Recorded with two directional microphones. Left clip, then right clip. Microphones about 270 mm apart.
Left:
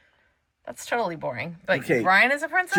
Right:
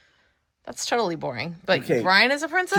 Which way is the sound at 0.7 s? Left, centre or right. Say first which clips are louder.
Right 2 dB; centre.